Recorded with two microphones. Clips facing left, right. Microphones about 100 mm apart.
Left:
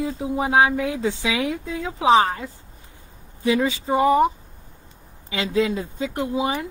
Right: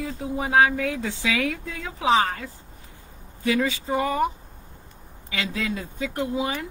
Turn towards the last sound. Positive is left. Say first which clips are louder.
# left 3 dB
turn(degrees=20)  # may be behind; listen again after turning